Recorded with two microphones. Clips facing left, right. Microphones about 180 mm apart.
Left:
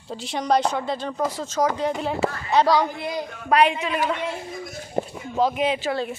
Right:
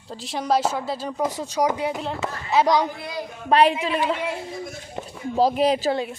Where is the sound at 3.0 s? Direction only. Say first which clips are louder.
Left 3 dB; 20° left (ahead or behind).